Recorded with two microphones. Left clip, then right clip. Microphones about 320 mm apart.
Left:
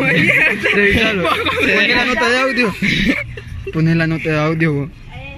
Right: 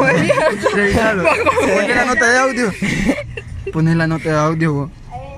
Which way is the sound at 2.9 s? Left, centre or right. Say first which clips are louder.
Left 2 dB; right.